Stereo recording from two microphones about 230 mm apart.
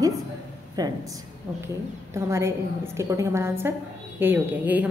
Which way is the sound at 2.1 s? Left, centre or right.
Centre.